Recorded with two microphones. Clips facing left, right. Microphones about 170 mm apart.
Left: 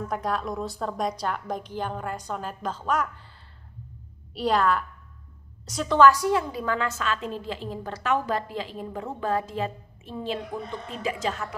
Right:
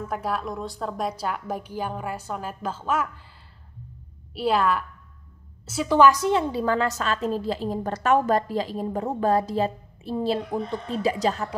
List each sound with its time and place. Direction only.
0.1 s a woman's voice: 5° right (ahead or behind)
4.3 s a woman's voice: 5° right (ahead or behind); by 11.4 s 35° right (ahead or behind)